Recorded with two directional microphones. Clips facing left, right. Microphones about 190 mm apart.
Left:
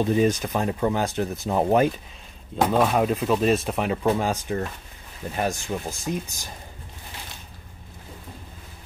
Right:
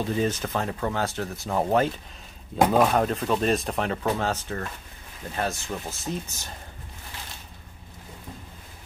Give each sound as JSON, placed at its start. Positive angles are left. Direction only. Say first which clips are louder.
{"t": 0.0, "sound": "speech", "louder": "left 5 dB", "side_deg": 15}
{"t": 2.5, "sound": "speech", "louder": "right 1 dB", "side_deg": -5}
{"t": 2.9, "sound": "speech", "louder": "left 2 dB", "side_deg": 5}